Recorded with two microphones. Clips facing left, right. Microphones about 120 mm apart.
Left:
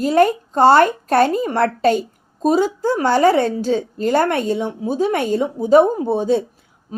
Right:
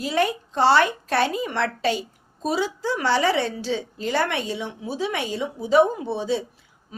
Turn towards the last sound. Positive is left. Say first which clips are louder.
# left 9 dB
turn(degrees=40)  # may be behind; listen again after turning